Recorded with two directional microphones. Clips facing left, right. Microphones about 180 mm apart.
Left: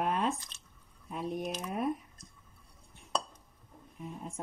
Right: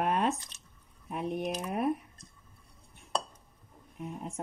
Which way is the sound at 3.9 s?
80° right.